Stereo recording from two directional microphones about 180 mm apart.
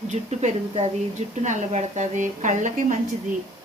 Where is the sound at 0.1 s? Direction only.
40° right (ahead or behind).